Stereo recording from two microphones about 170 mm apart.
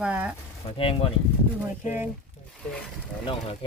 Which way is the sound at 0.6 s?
35° left (ahead or behind).